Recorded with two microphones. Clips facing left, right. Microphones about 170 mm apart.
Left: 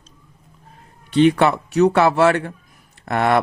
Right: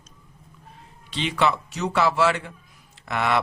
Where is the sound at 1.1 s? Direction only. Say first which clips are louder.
Left 9 dB; 55° left (ahead or behind).